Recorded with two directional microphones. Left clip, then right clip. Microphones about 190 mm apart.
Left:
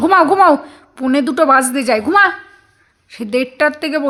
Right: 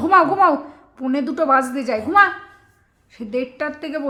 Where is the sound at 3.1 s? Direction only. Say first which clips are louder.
Left 7 dB; 40° left (ahead or behind).